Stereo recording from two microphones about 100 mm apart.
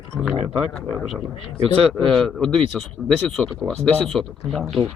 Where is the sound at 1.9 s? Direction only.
10° left (ahead or behind).